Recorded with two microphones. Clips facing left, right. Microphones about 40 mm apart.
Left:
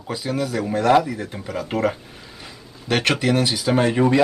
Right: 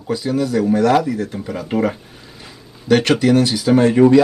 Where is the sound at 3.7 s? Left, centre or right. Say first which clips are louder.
Right 6 dB; centre.